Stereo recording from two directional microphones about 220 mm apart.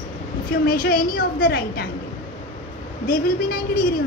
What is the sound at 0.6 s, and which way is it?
A woman's voice, 40° left (ahead or behind).